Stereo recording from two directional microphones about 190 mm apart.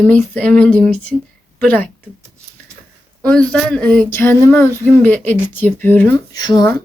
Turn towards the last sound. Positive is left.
turn(degrees=20)  # may be behind; listen again after turning